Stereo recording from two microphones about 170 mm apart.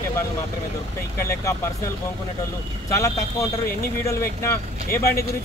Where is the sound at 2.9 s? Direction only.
20° left (ahead or behind).